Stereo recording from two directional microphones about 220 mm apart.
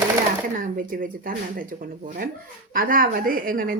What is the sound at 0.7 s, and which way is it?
Speech, 40° right (ahead or behind).